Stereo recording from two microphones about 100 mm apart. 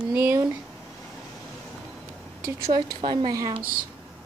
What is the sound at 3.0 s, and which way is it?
Speech, 65° right (ahead or behind).